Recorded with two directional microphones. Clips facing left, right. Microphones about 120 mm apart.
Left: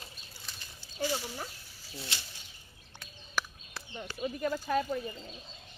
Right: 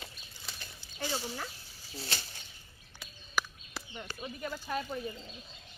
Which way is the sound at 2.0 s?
45° right (ahead or behind).